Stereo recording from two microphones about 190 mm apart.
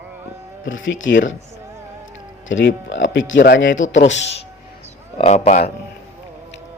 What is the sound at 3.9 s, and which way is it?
Speech, 75° left (ahead or behind).